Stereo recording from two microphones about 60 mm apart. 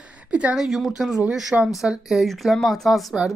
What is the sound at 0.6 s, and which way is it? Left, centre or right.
Speech, centre.